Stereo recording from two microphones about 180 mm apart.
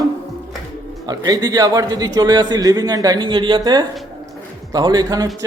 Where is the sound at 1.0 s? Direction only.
20° right (ahead or behind).